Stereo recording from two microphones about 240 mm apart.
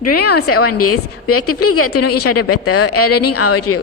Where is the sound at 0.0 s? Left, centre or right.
Left.